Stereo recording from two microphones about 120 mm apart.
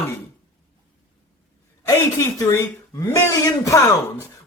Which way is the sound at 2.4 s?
25° left (ahead or behind).